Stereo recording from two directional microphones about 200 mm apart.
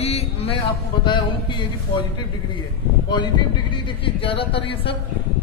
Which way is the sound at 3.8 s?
25° left (ahead or behind).